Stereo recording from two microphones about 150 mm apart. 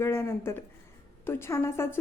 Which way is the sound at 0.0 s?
15° left (ahead or behind).